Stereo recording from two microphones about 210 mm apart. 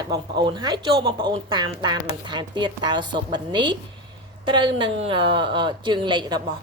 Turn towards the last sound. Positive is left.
turn(degrees=-20)  # may be behind; listen again after turning